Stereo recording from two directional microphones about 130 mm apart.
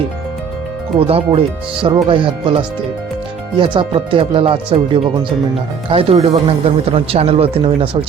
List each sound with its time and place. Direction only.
0.9 s speech: 45° right (ahead or behind)